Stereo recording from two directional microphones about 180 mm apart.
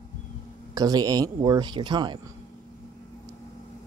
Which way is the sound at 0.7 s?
20° right (ahead or behind).